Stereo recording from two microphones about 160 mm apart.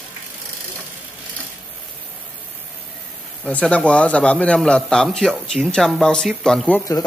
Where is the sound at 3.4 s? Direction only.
10° left (ahead or behind).